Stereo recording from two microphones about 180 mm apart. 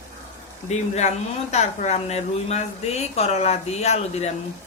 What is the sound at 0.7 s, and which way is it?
A woman's voice, 40° left (ahead or behind).